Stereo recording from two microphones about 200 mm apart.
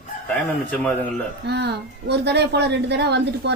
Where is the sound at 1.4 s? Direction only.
55° right (ahead or behind).